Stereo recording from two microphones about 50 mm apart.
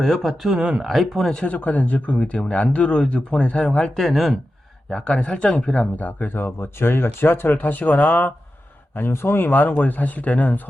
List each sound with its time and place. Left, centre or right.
0.0 s speech: centre
0.6 s speech: right
0.9 s speech: centre
1.5 s speech: left
3.9 s speech: centre
4.9 s speech: centre
6.0 s speech: left
9.0 s speech: left